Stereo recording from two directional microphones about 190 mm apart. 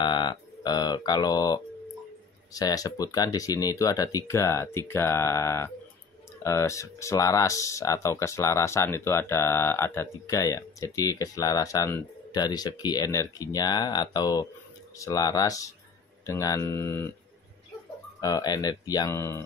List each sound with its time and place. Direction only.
0.0 s mantra: 20° left (ahead or behind)
2.5 s speech: 20° left (ahead or behind)
18.2 s speech: 20° left (ahead or behind)